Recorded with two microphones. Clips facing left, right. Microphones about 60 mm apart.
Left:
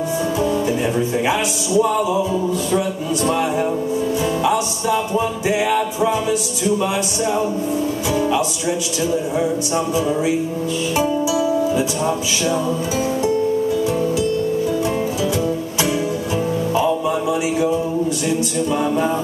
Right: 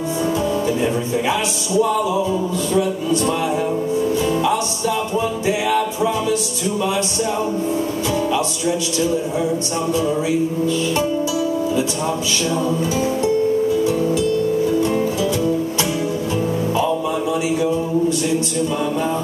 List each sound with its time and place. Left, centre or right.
1.8 s music: centre
8.3 s music: centre
16.7 s music: centre